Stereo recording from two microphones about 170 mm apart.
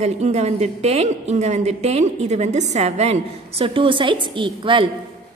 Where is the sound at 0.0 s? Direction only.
40° right (ahead or behind).